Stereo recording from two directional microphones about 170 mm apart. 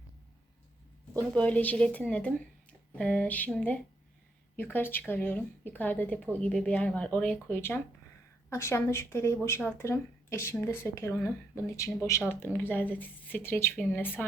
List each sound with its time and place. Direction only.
1.1 s speech: 5° left (ahead or behind)